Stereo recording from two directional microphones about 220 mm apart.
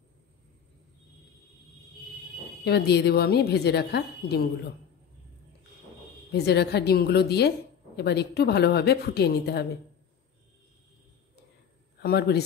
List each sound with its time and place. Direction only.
2.6 s a woman's voice: 45° left (ahead or behind)
6.3 s a woman's voice: 50° left (ahead or behind)
12.0 s a woman's voice: 45° left (ahead or behind)